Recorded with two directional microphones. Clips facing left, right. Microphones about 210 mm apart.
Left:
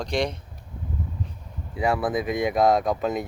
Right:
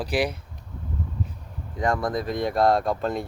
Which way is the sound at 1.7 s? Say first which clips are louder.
Left 1 dB; 10° left (ahead or behind).